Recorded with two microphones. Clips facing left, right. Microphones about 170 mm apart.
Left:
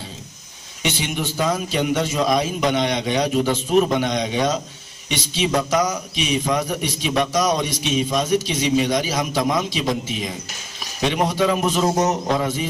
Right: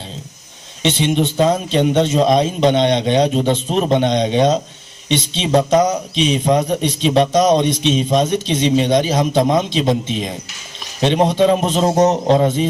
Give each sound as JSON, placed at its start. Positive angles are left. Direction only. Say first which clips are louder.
{"t": 0.8, "sound": "a man's voice", "louder": "right 8 dB", "side_deg": -25}
{"t": 11.0, "sound": "a man's voice", "louder": "right 6 dB", "side_deg": -25}